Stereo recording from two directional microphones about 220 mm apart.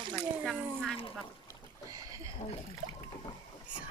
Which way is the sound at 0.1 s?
5° left (ahead or behind).